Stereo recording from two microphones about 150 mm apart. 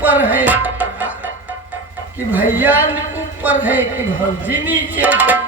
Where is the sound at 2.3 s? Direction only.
10° right (ahead or behind).